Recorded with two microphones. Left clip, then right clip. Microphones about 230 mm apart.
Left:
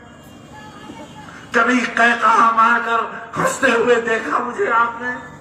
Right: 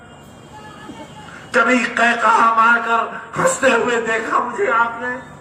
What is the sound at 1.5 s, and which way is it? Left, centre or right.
A man's voice, right.